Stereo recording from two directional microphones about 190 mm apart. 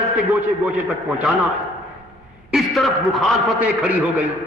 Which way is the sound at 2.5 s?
Centre (ahead or behind).